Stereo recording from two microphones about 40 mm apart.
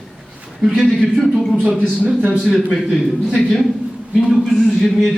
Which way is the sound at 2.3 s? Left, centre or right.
Centre.